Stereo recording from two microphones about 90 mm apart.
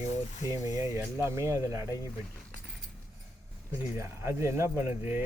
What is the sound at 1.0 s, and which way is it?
Speech, 30° right (ahead or behind).